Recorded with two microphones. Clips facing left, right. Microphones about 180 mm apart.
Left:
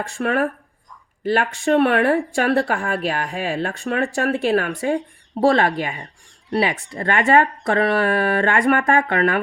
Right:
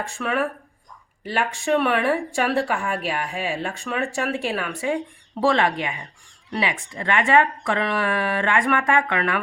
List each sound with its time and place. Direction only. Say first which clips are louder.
0.2 s speech: left 4 dB; 50° left (ahead or behind)